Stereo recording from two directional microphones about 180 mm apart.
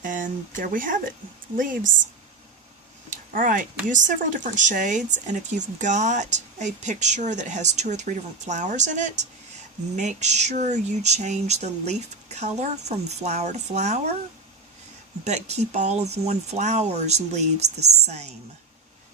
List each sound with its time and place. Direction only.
0.0 s speech: 45° right (ahead or behind)
3.3 s speech: 50° right (ahead or behind)
15.2 s speech: 40° right (ahead or behind)